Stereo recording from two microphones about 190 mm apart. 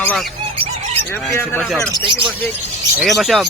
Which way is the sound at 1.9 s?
25° right (ahead or behind).